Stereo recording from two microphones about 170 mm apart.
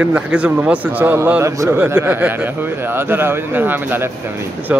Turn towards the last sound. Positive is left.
turn(degrees=-10)  # may be behind; listen again after turning